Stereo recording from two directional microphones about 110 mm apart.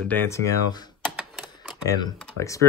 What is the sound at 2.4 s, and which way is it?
Speech, 30° left (ahead or behind).